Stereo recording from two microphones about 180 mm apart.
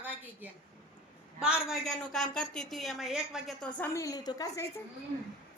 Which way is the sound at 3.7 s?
15° left (ahead or behind).